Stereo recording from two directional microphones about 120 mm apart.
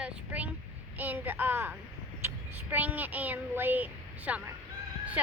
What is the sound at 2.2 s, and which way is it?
A woman's voice, 15° right (ahead or behind).